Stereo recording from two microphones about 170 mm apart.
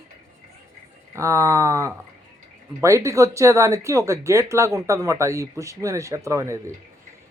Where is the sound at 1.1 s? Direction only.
15° right (ahead or behind).